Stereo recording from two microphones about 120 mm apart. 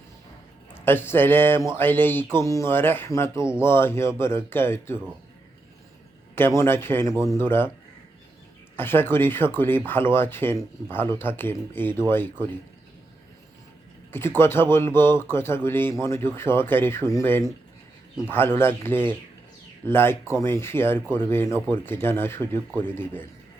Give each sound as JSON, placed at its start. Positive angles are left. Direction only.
{"t": 0.7, "sound": "speech", "side_deg": 15}
{"t": 6.6, "sound": "speech", "side_deg": 20}
{"t": 8.7, "sound": "speech", "side_deg": 20}
{"t": 14.1, "sound": "speech", "side_deg": 20}